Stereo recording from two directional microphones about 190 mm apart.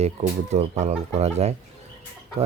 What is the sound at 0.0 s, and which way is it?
Speech, 35° right (ahead or behind).